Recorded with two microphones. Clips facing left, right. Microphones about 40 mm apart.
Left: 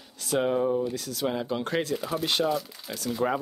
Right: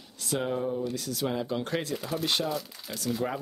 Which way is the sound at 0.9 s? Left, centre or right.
Centre.